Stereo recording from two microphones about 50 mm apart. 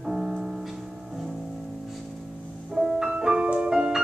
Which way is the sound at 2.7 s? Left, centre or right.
Centre.